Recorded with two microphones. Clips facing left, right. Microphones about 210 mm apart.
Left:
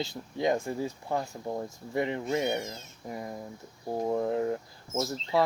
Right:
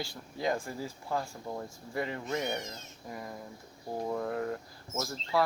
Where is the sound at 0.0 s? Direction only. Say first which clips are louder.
Left 5 dB; 20° left (ahead or behind).